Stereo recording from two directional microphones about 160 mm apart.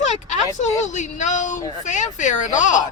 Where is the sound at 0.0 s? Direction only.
45° left (ahead or behind).